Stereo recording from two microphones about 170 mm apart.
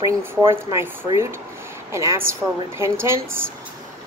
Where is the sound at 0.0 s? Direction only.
15° right (ahead or behind).